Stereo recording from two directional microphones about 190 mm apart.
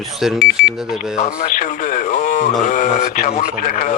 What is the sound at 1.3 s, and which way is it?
Radio, 45° left (ahead or behind).